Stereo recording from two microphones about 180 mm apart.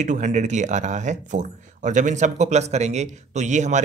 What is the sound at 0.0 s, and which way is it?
Speech, 45° right (ahead or behind).